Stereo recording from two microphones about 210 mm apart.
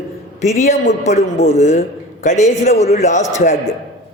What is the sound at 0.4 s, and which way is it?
Speech, 30° left (ahead or behind).